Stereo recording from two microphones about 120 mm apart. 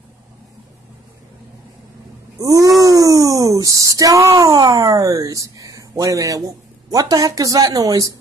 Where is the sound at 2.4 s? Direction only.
30° right (ahead or behind).